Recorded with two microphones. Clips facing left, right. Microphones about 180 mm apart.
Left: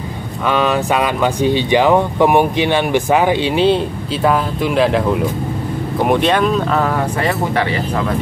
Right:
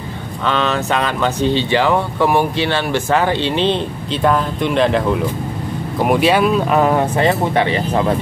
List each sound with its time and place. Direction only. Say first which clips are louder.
0.5 s speech: left 2 dB; 10° left (ahead or behind); by 6.8 s 10° right (ahead or behind)
6.8 s speech: right 3 dB; 25° right (ahead or behind)